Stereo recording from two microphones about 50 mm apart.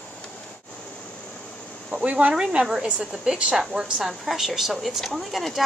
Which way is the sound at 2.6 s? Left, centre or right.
Centre.